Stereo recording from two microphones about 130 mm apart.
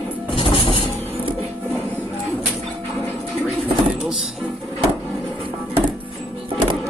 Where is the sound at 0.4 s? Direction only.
45° left (ahead or behind).